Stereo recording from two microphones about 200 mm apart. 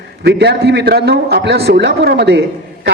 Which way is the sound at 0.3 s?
55° right (ahead or behind).